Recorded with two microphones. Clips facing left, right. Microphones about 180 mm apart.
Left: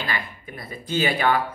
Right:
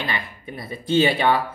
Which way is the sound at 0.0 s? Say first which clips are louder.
Right 1 dB; 20° right (ahead or behind).